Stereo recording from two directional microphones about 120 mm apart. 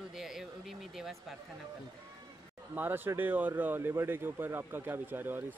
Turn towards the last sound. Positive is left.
turn(degrees=-15)  # may be behind; listen again after turning